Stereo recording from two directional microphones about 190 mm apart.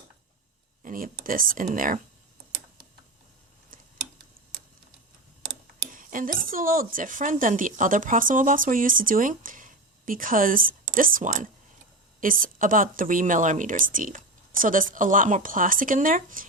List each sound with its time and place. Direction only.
0.8 s speech: 45° right (ahead or behind)
5.9 s speech: 45° right (ahead or behind)